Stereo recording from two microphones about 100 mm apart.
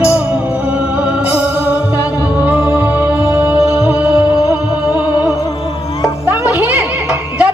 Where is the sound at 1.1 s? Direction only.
15° right (ahead or behind).